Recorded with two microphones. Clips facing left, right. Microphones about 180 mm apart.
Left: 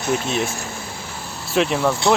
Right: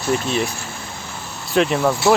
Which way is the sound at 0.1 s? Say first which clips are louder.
Right 1 dB; centre (ahead or behind).